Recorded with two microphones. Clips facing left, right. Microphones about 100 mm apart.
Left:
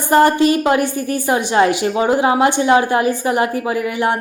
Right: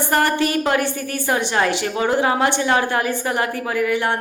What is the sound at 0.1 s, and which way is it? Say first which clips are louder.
A woman's voice: left 8 dB; 20° left (ahead or behind).